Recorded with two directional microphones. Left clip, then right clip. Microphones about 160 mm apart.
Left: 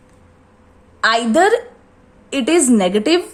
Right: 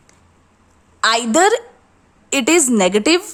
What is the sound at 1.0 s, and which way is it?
A woman's voice, 30° right (ahead or behind).